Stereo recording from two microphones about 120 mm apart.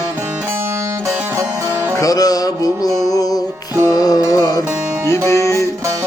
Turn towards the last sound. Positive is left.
turn(degrees=25)  # may be behind; listen again after turning